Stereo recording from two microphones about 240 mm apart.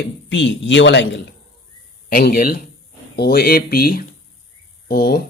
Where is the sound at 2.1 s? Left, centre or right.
Left.